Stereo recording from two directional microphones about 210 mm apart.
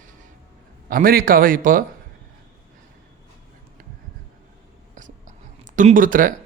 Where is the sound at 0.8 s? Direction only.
45° right (ahead or behind).